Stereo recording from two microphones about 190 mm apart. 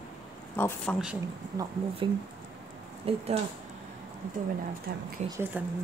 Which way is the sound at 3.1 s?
30° right (ahead or behind).